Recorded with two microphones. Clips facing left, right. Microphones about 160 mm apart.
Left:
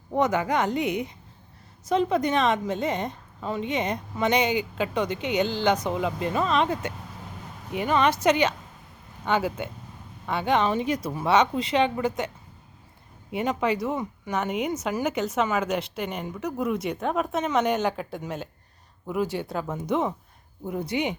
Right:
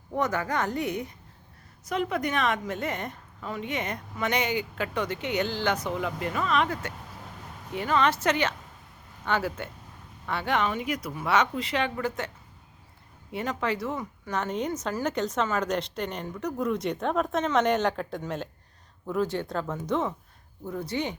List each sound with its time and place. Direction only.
0.1 s a woman's voice: 20° left (ahead or behind)
13.3 s speech: 15° left (ahead or behind)